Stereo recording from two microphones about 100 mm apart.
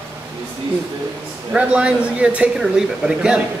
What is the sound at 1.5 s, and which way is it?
Speech, 10° right (ahead or behind).